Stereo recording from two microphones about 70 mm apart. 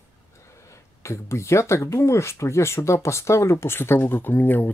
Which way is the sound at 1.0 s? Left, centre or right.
Left.